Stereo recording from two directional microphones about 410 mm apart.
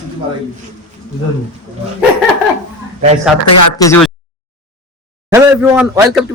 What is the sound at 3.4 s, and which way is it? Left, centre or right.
Speech, left.